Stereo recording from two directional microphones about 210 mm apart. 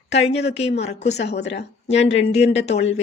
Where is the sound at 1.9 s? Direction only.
30° left (ahead or behind).